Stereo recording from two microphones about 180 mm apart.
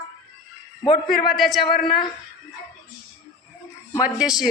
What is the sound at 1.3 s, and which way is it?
Speech, centre (ahead or behind).